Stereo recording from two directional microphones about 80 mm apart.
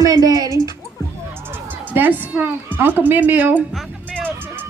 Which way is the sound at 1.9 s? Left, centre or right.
Right.